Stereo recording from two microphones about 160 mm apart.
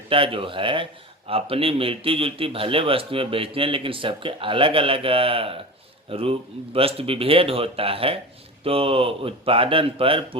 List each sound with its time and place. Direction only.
0.1 s a man's voice: 35° right (ahead or behind)